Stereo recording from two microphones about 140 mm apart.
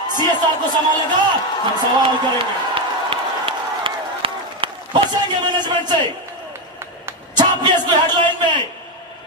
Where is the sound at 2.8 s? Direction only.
40° right (ahead or behind).